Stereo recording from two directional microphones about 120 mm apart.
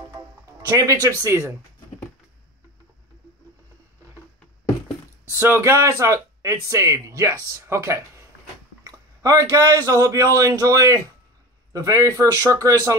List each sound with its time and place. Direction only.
0.1 s music: 25° right (ahead or behind)
1.2 s speech: 25° right (ahead or behind)
5.3 s speech: 20° right (ahead or behind)